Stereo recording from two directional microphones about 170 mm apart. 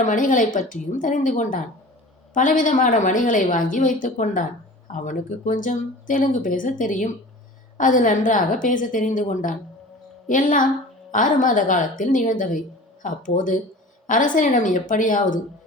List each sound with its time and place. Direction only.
0.0 s a woman's voice: 50° left (ahead or behind)